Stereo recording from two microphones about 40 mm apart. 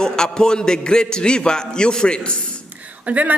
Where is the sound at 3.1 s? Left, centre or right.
Right.